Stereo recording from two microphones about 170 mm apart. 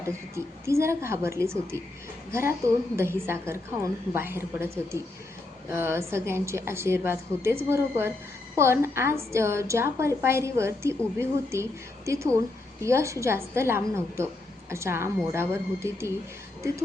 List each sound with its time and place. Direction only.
0.0 s a woman's voice: 15° right (ahead or behind)